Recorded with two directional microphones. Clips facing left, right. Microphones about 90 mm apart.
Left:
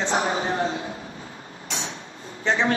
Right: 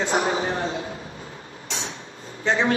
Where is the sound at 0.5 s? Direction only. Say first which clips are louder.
Left 2 dB; 30° left (ahead or behind).